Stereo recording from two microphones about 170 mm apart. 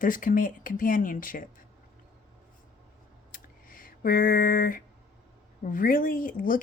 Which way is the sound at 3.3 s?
55° left (ahead or behind).